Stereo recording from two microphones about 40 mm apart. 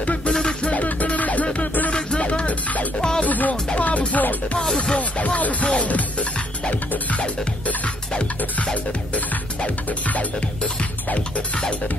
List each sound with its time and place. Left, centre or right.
0.0 s music: left
0.3 s music: left
0.7 s music: left
3.2 s speech: left
3.7 s music: left
4.6 s music: centre
4.9 s music: left
9.8 s music: left